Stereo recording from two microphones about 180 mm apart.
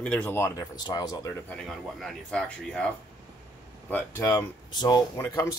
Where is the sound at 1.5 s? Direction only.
5° left (ahead or behind).